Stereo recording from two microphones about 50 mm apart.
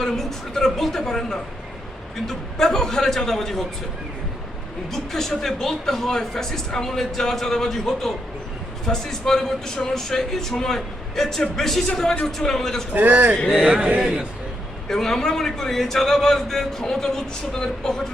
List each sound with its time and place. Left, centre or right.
0.0 s a woman's voice: centre
4.9 s speech: centre
12.9 s a man's voice: right
13.7 s speech: centre
14.8 s speech: centre